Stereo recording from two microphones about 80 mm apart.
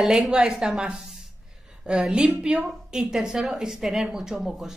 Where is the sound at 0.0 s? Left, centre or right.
Centre.